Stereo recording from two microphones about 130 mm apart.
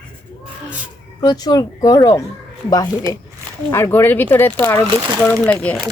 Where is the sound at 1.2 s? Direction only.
30° left (ahead or behind).